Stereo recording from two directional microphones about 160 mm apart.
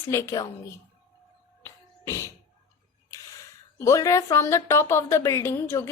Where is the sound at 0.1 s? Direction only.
20° left (ahead or behind).